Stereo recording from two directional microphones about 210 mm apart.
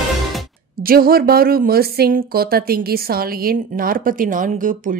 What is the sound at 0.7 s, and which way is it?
A woman's voice, 45° right (ahead or behind).